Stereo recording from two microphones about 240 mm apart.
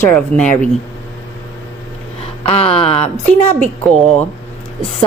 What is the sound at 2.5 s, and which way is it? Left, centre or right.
Speech, left.